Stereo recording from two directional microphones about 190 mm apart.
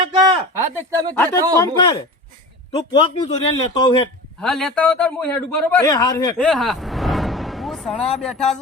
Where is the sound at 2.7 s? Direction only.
30° left (ahead or behind).